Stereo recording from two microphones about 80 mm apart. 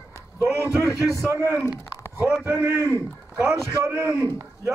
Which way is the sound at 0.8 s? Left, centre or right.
Left.